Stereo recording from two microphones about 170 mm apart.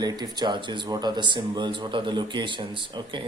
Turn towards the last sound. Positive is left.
turn(degrees=-30)  # may be behind; listen again after turning